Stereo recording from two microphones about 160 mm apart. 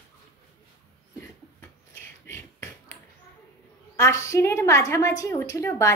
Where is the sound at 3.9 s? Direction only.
20° left (ahead or behind).